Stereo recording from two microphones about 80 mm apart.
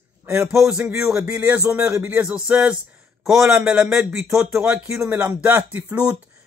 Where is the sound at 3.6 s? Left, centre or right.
Centre.